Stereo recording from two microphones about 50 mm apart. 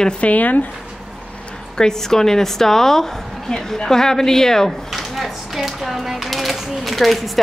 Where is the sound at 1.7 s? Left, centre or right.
Centre.